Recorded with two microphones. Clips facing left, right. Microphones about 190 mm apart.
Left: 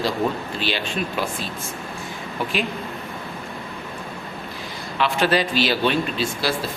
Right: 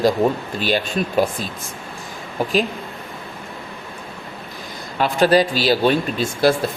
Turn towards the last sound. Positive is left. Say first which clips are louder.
# right 6 dB
turn(degrees=-45)  # may be behind; listen again after turning